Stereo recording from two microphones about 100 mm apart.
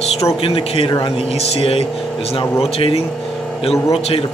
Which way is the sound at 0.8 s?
45° left (ahead or behind).